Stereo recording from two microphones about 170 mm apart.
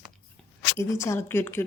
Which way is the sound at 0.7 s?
15° left (ahead or behind).